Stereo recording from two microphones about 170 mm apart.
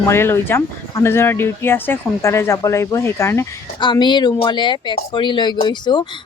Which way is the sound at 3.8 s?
25° left (ahead or behind).